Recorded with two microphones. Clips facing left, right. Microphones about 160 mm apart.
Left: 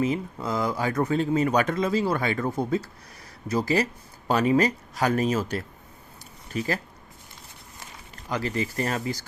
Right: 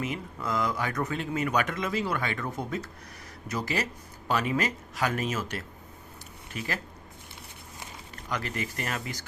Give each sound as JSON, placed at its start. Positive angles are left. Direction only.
{"t": 0.0, "sound": "speech", "side_deg": 30}
{"t": 8.3, "sound": "speech", "side_deg": 30}